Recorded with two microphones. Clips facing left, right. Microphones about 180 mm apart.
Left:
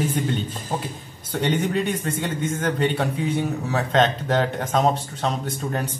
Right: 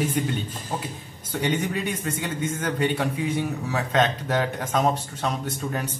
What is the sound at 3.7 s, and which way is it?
Speech, 35° left (ahead or behind).